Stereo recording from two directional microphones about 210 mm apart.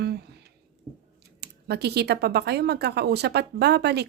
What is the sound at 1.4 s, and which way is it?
Speech, 50° right (ahead or behind).